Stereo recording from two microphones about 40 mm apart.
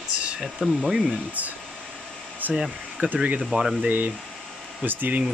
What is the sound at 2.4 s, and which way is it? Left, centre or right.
Hair dryer, right.